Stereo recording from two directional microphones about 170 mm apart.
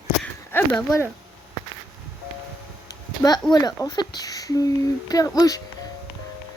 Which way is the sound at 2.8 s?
20° left (ahead or behind).